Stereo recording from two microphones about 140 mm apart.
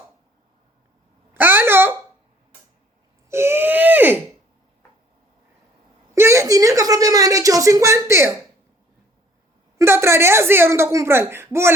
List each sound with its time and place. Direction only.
1.3 s babbling: 15° right (ahead or behind)
3.2 s wheeze: 20° right (ahead or behind)
6.1 s a sound: 20° right (ahead or behind)
9.7 s speech: 20° right (ahead or behind)